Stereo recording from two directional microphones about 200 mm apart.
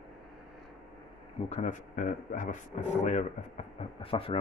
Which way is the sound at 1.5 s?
35° left (ahead or behind).